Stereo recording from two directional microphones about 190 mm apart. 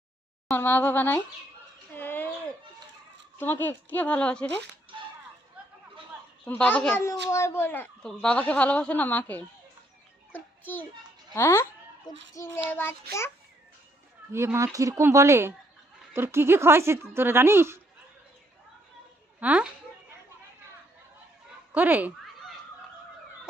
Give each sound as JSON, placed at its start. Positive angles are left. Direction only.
{"t": 0.4, "sound": "speech", "side_deg": 10}
{"t": 1.9, "sound": "a sound", "side_deg": 10}
{"t": 3.3, "sound": "speech", "side_deg": 10}
{"t": 4.9, "sound": "whip", "side_deg": -25}
{"t": 6.4, "sound": "speech", "side_deg": 5}
{"t": 11.3, "sound": "a sound", "side_deg": 15}
{"t": 12.3, "sound": "speech", "side_deg": 15}
{"t": 14.3, "sound": "speech", "side_deg": -15}
{"t": 19.4, "sound": "a woman's voice", "side_deg": -5}
{"t": 21.7, "sound": "fowl", "side_deg": -10}